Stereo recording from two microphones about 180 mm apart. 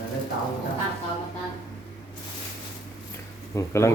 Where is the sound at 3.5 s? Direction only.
15° left (ahead or behind).